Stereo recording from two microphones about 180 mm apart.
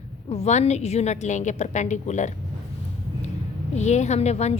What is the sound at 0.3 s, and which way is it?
A woman's voice, 35° left (ahead or behind).